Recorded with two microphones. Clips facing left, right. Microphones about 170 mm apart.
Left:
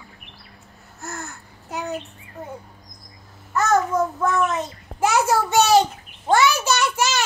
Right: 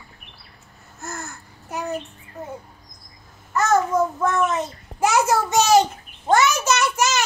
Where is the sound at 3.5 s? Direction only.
Centre (ahead or behind).